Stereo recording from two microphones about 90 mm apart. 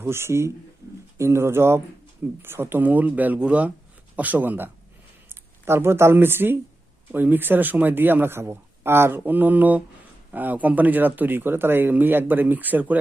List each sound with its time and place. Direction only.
0.0 s speech: 30° right (ahead or behind)